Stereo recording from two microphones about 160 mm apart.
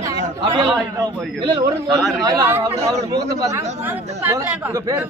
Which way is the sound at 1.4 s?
25° right (ahead or behind).